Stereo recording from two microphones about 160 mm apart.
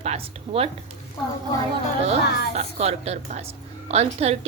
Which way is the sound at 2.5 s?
40° right (ahead or behind).